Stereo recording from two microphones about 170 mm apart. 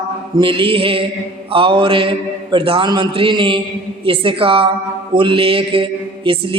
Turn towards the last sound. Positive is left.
turn(degrees=-30)  # may be behind; listen again after turning